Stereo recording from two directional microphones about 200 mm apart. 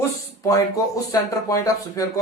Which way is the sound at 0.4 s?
15° left (ahead or behind).